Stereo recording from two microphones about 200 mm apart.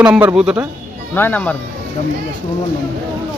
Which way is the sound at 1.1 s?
10° left (ahead or behind).